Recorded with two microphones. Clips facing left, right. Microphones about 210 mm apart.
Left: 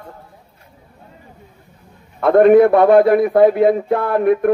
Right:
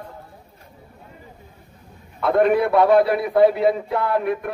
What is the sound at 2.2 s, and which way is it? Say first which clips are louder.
A man's voice: left 8 dB; 50° left (ahead or behind).